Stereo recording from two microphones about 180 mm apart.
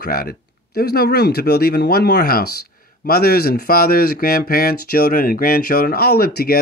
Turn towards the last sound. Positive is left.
turn(degrees=60)  # may be behind; listen again after turning